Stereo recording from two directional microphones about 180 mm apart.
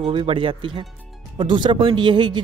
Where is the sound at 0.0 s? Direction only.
30° right (ahead or behind).